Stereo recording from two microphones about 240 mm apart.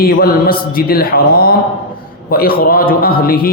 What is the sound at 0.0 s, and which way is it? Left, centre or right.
A man's voice, left.